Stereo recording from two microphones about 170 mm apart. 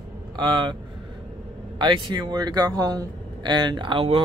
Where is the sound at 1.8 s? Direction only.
25° right (ahead or behind).